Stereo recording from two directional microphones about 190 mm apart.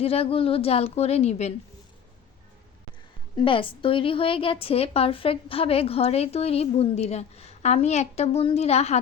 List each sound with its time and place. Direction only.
0.0 s a woman's voice: 30° left (ahead or behind)
3.3 s a woman's voice: 25° left (ahead or behind)